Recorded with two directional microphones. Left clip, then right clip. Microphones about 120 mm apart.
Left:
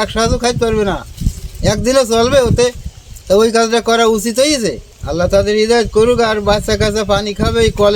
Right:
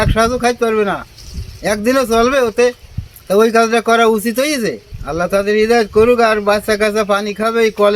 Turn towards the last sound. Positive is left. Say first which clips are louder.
# even
turn(degrees=30)  # may be behind; listen again after turning